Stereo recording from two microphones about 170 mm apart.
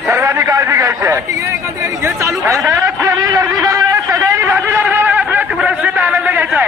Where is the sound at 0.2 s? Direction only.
20° right (ahead or behind).